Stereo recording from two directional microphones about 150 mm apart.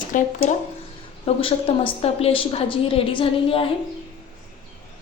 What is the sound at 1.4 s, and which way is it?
A woman's voice, 35° left (ahead or behind).